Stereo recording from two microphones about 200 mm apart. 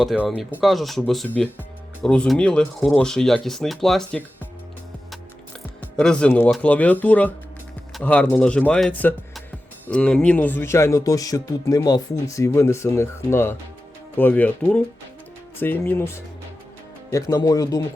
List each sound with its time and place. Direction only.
0.0 s speech: centre (ahead or behind)
6.0 s speech: 5° left (ahead or behind)